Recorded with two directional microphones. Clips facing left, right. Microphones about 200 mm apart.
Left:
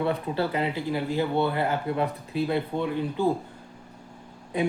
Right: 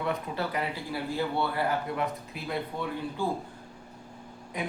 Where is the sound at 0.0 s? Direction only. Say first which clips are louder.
Left 5 dB; 30° left (ahead or behind).